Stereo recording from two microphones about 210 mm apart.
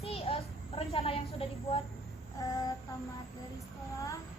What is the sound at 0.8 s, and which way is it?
Speech, 25° left (ahead or behind).